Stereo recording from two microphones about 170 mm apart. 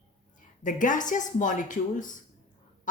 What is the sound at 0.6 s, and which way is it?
A woman's voice, 50° left (ahead or behind).